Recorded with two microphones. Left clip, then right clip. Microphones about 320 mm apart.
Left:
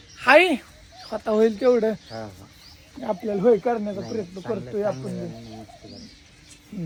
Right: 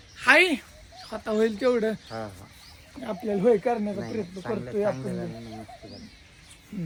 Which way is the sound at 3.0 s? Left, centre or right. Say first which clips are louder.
Left 3 dB; centre.